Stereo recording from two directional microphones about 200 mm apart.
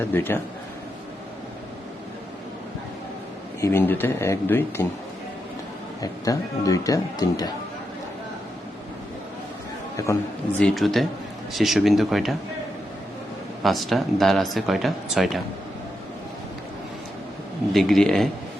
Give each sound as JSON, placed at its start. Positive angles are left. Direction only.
{"t": 0.0, "sound": "speech", "side_deg": 10}
{"t": 3.6, "sound": "speech", "side_deg": 10}
{"t": 6.0, "sound": "speech", "side_deg": 15}
{"t": 10.0, "sound": "speech", "side_deg": 15}
{"t": 10.6, "sound": "speech", "side_deg": 0}
{"t": 13.6, "sound": "speech", "side_deg": 0}
{"t": 17.7, "sound": "speech", "side_deg": 0}